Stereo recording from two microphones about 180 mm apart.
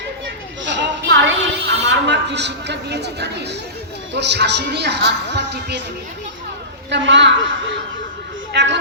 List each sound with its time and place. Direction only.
0.6 s a sound: 80° right
4.1 s speech: 70° right (ahead or behind)
6.9 s a woman's voice: 80° right
8.5 s speech: 75° right (ahead or behind)